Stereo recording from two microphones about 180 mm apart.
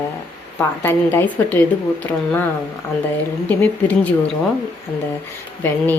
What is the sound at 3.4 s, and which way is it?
Speech, 10° left (ahead or behind).